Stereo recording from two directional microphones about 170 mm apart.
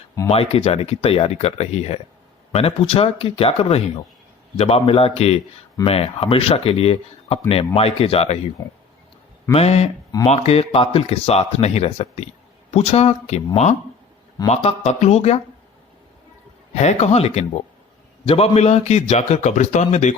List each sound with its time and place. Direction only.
0.5 s speech: 35° left (ahead or behind)
9.5 s speech: 40° left (ahead or behind)
14.4 s speech: 35° left (ahead or behind)
16.7 s speech: 40° left (ahead or behind)